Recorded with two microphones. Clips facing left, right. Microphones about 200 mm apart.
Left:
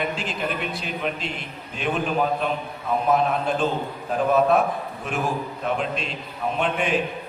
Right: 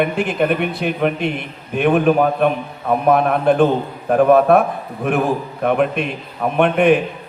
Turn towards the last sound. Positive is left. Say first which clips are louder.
# right 10 dB
turn(degrees=-60)  # may be behind; listen again after turning